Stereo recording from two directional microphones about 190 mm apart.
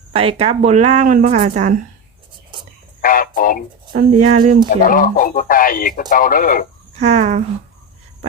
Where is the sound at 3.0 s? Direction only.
45° left (ahead or behind).